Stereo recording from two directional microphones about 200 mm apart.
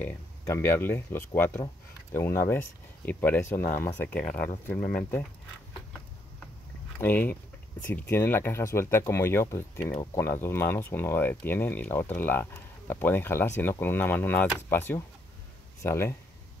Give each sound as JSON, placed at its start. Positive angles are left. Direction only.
{"t": 0.0, "sound": "speech", "side_deg": 10}
{"t": 4.1, "sound": "speech", "side_deg": 45}
{"t": 7.0, "sound": "speech", "side_deg": 10}